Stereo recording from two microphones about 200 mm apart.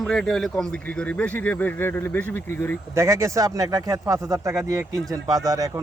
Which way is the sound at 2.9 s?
15° right (ahead or behind).